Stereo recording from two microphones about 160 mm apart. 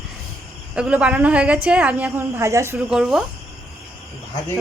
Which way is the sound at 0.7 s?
5° right (ahead or behind).